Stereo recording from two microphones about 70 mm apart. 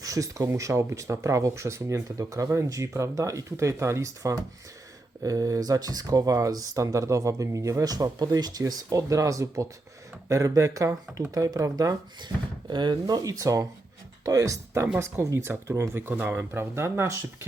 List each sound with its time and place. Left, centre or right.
0.0 s speech: right
7.9 s speech: right
12.2 s speech: right
13.3 s speech: right